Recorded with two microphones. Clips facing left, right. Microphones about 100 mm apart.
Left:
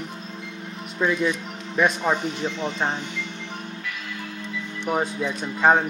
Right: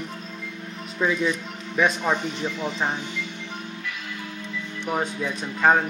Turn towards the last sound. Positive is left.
turn(degrees=10)  # may be behind; listen again after turning